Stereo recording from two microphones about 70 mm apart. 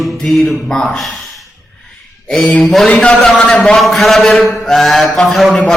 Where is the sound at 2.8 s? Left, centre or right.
Centre.